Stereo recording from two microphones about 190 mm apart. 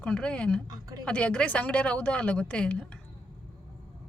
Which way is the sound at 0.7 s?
20° right (ahead or behind).